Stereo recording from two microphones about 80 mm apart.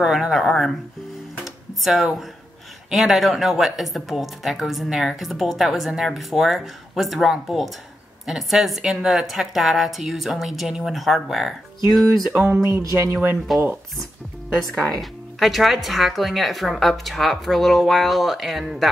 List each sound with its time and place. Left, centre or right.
0.0 s speech: centre
1.4 s guitar: centre
2.9 s speech: centre
12.3 s a sound: right
12.6 s speech: right
13.1 s a sound: right
14.6 s speech: centre